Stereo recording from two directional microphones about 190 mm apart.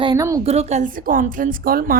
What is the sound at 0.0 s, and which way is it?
Speech, 20° right (ahead or behind).